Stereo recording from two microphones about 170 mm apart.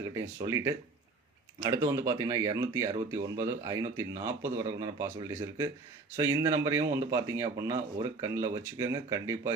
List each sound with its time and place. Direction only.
0.0 s a man's voice: 20° right (ahead or behind)